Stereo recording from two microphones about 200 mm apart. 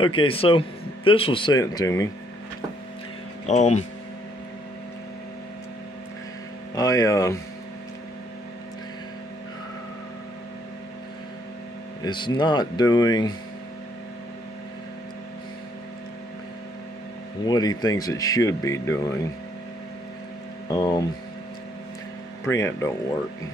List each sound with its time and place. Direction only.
0.0 s speech: 25° left (ahead or behind)
3.4 s speech: 35° left (ahead or behind)
6.7 s speech: 15° left (ahead or behind)
12.0 s speech: 20° left (ahead or behind)
17.5 s speech: 20° left (ahead or behind)
20.7 s speech: 20° left (ahead or behind)
22.5 s speech: 15° left (ahead or behind)